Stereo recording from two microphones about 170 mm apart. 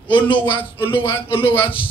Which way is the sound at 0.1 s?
30° left (ahead or behind).